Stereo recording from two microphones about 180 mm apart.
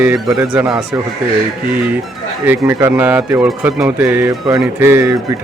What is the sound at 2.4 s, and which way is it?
Speech, 10° right (ahead or behind).